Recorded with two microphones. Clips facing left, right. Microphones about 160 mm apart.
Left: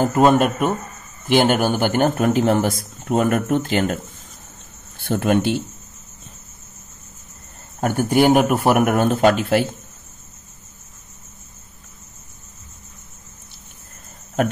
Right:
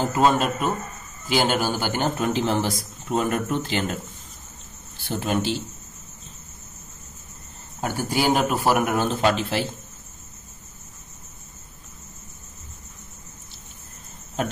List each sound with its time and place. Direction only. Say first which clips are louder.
0.0 s a man's voice: left 5 dB; 55° left (ahead or behind)
7.8 s a man's voice: left 7 dB; 60° left (ahead or behind)